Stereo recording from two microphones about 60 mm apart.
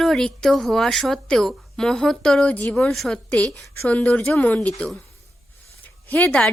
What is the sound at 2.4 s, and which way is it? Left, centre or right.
Speech, left.